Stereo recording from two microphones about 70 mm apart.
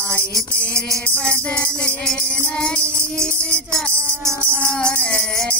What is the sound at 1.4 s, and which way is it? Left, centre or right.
Music, centre.